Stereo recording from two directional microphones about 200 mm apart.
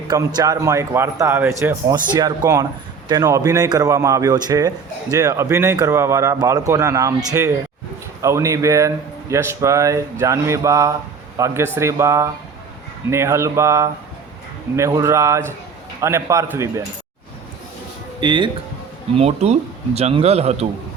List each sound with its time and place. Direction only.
0.3 s speech: 15° right (ahead or behind)
18.2 s a man's voice: 25° right (ahead or behind)